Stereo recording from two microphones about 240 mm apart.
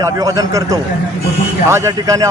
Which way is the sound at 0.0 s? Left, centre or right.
Centre.